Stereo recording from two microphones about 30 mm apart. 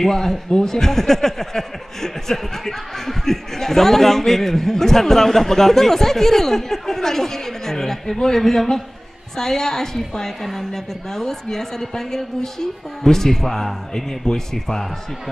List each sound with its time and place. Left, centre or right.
0.0 s a man's voice: centre